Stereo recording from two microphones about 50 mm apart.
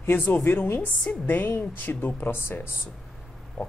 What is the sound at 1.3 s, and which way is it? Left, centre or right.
A woman's voice, left.